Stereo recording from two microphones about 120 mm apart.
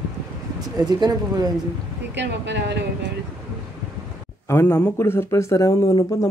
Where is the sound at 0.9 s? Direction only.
35° right (ahead or behind).